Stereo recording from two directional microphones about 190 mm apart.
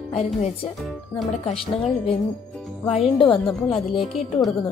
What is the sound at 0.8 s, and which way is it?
Speech, centre (ahead or behind).